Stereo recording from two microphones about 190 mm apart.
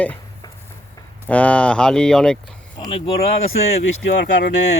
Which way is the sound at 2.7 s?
25° left (ahead or behind).